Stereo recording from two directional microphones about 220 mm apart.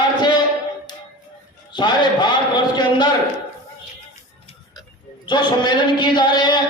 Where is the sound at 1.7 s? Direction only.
20° left (ahead or behind).